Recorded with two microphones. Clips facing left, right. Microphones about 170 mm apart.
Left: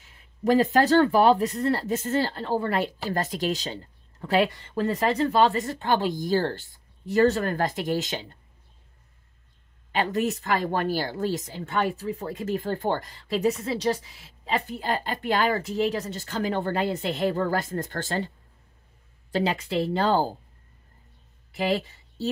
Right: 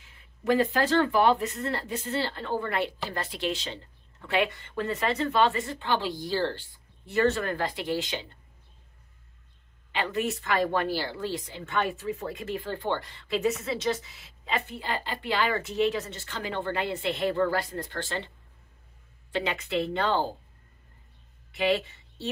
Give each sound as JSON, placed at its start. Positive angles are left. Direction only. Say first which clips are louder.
{"t": 0.0, "sound": "speech", "louder": "left 5 dB", "side_deg": 40}
{"t": 9.9, "sound": "speech", "louder": "left 4 dB", "side_deg": 40}
{"t": 19.3, "sound": "speech", "louder": "left 3 dB", "side_deg": 35}
{"t": 21.5, "sound": "speech", "louder": "even", "side_deg": 40}